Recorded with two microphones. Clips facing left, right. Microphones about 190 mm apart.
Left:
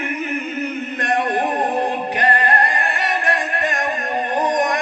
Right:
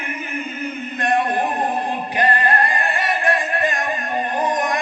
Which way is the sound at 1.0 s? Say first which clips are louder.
Right 1 dB; 70° left (ahead or behind).